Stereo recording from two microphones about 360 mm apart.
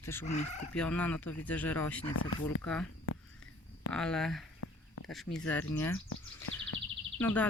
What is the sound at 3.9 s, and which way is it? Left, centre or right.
Speech, centre.